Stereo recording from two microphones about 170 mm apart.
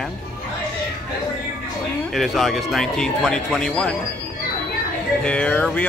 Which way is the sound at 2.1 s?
Centre (ahead or behind).